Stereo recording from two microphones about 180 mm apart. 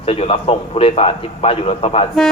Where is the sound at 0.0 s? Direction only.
35° left (ahead or behind).